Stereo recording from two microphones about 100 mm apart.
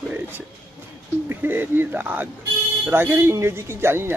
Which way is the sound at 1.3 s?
20° right (ahead or behind).